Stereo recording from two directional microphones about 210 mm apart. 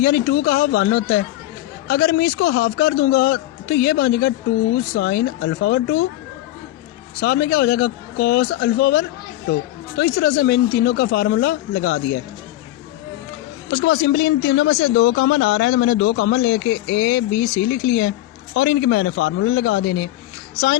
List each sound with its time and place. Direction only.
0.0 s a man's voice: 50° left (ahead or behind)
7.2 s a man's voice: 50° left (ahead or behind)
13.7 s speech: 50° left (ahead or behind)